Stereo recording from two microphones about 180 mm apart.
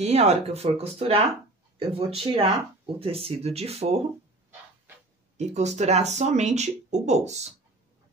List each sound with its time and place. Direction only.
0.0 s speech: 35° right (ahead or behind)
5.4 s speech: 40° right (ahead or behind)